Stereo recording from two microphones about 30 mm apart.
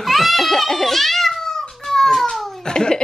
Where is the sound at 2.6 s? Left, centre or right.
Left.